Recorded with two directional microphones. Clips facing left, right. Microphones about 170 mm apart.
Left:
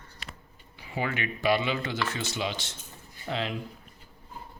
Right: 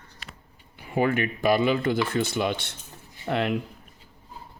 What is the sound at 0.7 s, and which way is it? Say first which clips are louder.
Speech: right 8 dB; 50° right (ahead or behind).